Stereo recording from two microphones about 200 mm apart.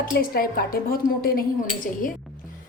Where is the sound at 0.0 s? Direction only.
45° left (ahead or behind).